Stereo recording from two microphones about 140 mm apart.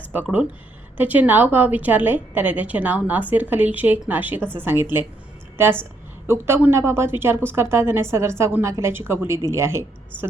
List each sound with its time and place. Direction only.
0.1 s a woman's voice: 10° right (ahead or behind)